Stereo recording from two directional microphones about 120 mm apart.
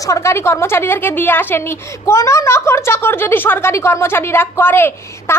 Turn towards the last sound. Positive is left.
turn(degrees=20)  # may be behind; listen again after turning